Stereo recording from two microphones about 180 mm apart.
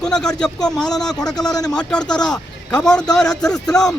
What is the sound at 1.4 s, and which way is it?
Speech, 20° left (ahead or behind).